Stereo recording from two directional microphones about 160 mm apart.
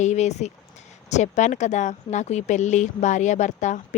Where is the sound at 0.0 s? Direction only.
45° left (ahead or behind).